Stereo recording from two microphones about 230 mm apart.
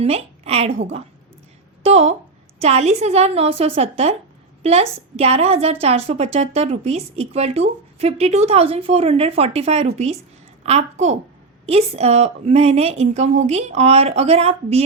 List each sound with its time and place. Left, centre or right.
0.0 s speech: right